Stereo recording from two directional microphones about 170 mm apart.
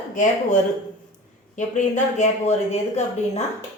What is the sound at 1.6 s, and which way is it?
A woman's voice, 45° left (ahead or behind).